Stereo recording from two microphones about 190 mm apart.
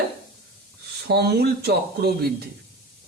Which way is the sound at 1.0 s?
60° right (ahead or behind).